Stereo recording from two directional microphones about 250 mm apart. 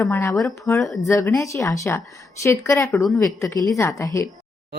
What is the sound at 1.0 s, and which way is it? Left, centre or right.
Speech, centre.